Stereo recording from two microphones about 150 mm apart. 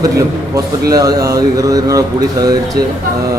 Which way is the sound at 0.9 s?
25° right (ahead or behind).